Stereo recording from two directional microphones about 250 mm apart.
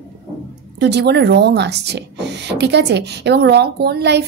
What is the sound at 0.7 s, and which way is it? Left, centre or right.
Speech, right.